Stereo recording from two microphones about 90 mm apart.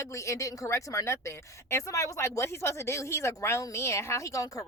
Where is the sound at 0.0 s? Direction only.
35° left (ahead or behind).